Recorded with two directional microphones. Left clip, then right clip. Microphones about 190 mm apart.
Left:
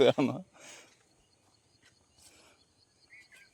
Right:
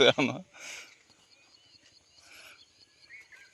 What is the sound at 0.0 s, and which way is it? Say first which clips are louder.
Speech: right 2 dB; 20° left (ahead or behind).